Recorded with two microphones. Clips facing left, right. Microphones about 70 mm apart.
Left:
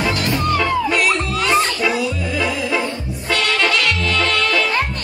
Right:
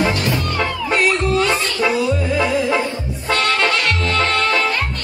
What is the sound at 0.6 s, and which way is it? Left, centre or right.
Music, right.